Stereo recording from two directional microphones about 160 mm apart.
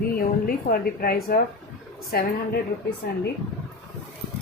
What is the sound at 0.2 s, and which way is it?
A woman's voice, 65° left (ahead or behind).